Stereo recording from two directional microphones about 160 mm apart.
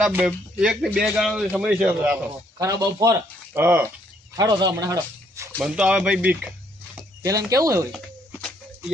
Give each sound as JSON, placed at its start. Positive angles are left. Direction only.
{"t": 0.0, "sound": "a man's voice", "side_deg": -10}
{"t": 2.6, "sound": "speech", "side_deg": -20}
{"t": 4.4, "sound": "speech", "side_deg": -25}
{"t": 5.6, "sound": "speech", "side_deg": -5}
{"t": 7.2, "sound": "speech", "side_deg": -20}
{"t": 7.9, "sound": "a sound", "side_deg": 5}